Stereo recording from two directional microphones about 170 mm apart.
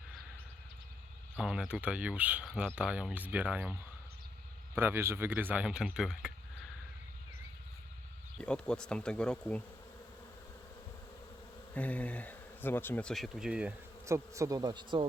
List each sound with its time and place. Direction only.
1.4 s speech: 5° right (ahead or behind)
8.4 s bee: 5° left (ahead or behind)
11.7 s speech: 10° left (ahead or behind); by 13.7 s 5° right (ahead or behind)
14.0 s speech: 15° right (ahead or behind)